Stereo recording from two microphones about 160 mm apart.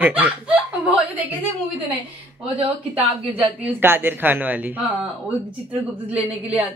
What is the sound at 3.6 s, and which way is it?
Speech, 15° right (ahead or behind).